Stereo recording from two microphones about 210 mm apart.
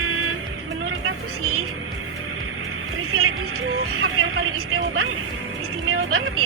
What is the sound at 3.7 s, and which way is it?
Speech, 75° right (ahead or behind).